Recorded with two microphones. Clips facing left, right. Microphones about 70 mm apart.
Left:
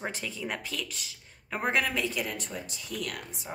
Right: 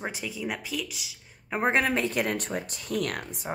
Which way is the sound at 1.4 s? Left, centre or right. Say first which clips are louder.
Right 4 dB; right.